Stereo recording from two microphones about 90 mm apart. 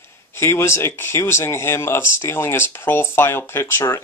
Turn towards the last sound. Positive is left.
turn(degrees=25)  # may be behind; listen again after turning